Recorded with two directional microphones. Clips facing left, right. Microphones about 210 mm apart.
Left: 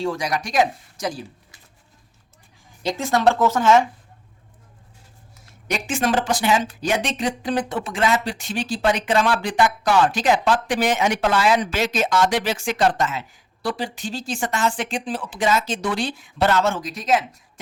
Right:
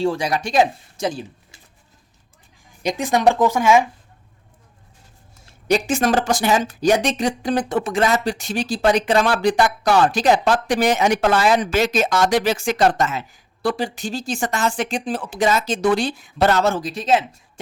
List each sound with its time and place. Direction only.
0.0 s speech: 30° right (ahead or behind)
2.8 s speech: 15° right (ahead or behind)
5.5 s speech: 35° right (ahead or behind)